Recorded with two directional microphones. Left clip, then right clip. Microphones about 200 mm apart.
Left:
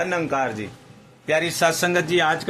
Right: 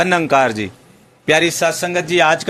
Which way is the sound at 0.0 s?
25° right (ahead or behind).